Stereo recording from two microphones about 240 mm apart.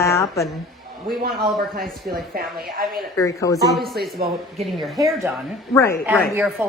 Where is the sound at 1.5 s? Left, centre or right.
Right.